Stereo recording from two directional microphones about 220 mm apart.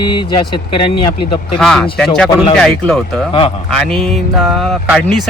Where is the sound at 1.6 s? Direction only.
Centre (ahead or behind).